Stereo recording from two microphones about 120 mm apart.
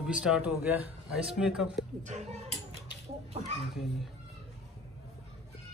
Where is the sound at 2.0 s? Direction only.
75° right (ahead or behind).